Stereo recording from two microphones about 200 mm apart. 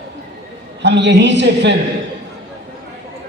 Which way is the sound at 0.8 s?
60° right (ahead or behind).